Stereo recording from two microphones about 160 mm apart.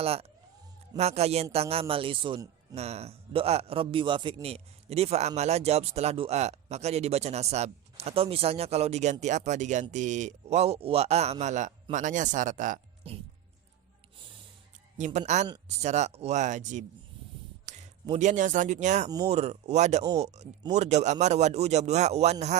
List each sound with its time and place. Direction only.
0.0 s a man's voice: 40° right (ahead or behind)
2.7 s a man's voice: 40° right (ahead or behind)
13.0 s a man's voice: 35° right (ahead or behind)
14.9 s a man's voice: 50° right (ahead or behind)
17.7 s a sound: 50° right (ahead or behind)
18.0 s a man's voice: 45° right (ahead or behind)